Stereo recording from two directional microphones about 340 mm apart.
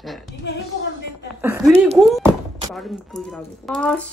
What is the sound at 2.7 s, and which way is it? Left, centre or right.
Speech, centre.